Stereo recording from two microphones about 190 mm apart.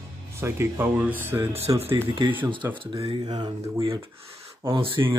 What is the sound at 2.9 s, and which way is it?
Speech, 20° right (ahead or behind).